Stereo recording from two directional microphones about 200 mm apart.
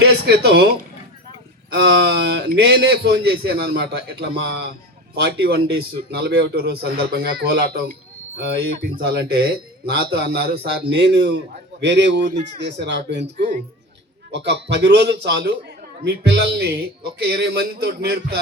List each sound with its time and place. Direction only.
0.0 s a man's voice: 55° right (ahead or behind)